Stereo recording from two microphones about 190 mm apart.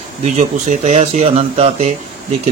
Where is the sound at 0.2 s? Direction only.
40° right (ahead or behind).